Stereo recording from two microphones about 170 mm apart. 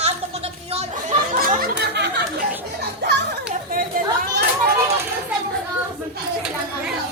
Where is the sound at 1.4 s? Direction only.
60° right (ahead or behind); by 2.2 s 75° right (ahead or behind).